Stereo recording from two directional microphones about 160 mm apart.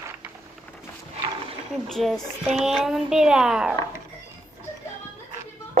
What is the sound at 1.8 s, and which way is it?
Speech, centre (ahead or behind).